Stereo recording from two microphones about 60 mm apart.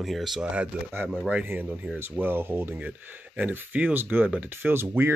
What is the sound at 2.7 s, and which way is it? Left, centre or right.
Speech, right.